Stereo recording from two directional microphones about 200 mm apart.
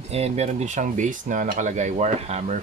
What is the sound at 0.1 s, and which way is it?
Speech, 30° right (ahead or behind).